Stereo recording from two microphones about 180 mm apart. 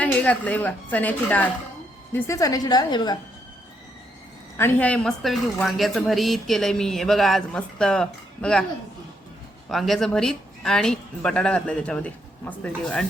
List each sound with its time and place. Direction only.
0.0 s a woman's voice: 5° left (ahead or behind); by 3.2 s 25° left (ahead or behind)
4.5 s speech: 10° left (ahead or behind)
9.6 s speech: centre (ahead or behind)